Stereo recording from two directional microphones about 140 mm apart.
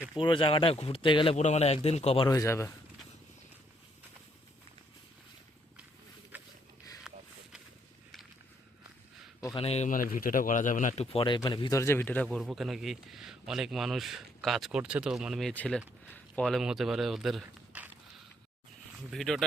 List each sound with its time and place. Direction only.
0.2 s speech: 35° left (ahead or behind)
1.4 s a man's voice: 50° left (ahead or behind)
2.2 s speech: 25° left (ahead or behind)
6.3 s a sound: 10° right (ahead or behind)
9.6 s a man's voice: 45° left (ahead or behind)
9.9 s speech: 80° left; by 11.8 s 35° left (ahead or behind)
11.8 s a man's voice: 15° left (ahead or behind)
12.4 s speech: centre (ahead or behind)
19.1 s speech: centre (ahead or behind)